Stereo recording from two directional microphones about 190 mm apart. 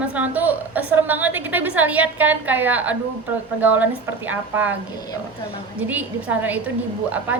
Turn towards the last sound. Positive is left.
turn(degrees=-10)  # may be behind; listen again after turning